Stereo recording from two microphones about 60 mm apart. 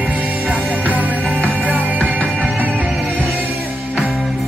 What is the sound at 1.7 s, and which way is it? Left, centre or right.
Music, right.